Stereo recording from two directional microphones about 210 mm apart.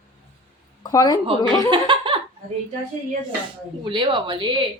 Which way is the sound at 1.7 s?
25° right (ahead or behind).